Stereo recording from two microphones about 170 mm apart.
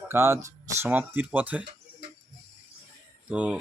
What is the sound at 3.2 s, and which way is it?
Speech, 5° right (ahead or behind).